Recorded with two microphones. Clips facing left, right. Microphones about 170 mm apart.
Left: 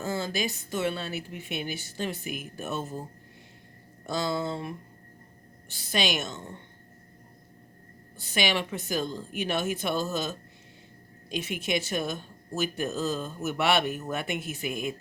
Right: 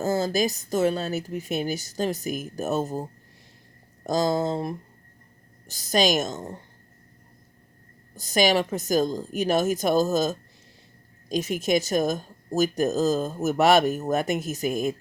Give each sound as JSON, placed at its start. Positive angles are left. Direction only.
{"t": 0.0, "sound": "speech", "side_deg": -40}
{"t": 8.1, "sound": "speech", "side_deg": -40}